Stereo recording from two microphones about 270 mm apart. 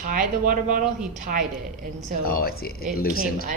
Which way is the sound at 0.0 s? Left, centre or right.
Right.